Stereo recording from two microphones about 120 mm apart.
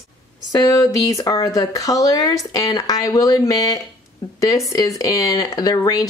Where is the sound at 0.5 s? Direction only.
30° left (ahead or behind).